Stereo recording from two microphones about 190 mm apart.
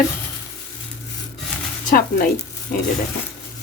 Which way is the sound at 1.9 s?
50° left (ahead or behind).